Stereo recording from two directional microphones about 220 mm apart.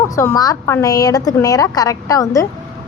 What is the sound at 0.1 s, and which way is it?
A woman's voice, 15° left (ahead or behind).